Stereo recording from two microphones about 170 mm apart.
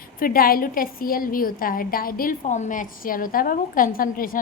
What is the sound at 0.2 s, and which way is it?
A woman's voice, 60° left (ahead or behind).